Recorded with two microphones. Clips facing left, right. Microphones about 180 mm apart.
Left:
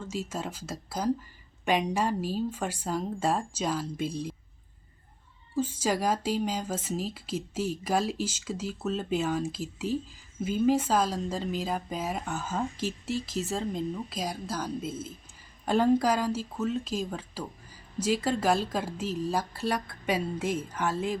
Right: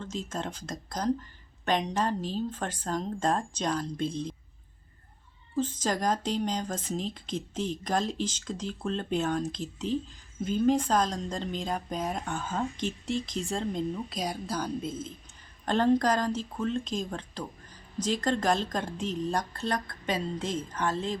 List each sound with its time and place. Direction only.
0.0 s speech: 10° left (ahead or behind)
5.5 s speech: 10° left (ahead or behind)